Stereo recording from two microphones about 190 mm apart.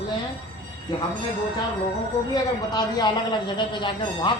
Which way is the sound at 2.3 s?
20° left (ahead or behind).